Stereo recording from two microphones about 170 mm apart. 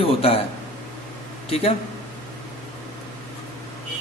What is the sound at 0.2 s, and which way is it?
Speech, 35° left (ahead or behind).